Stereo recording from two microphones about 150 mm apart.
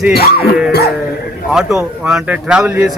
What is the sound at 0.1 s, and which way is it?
Music, 90° left.